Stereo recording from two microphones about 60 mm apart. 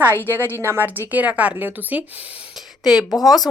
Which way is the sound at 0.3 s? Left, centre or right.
Right.